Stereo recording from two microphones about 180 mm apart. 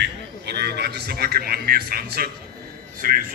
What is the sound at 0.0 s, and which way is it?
A man's voice, 65° right (ahead or behind).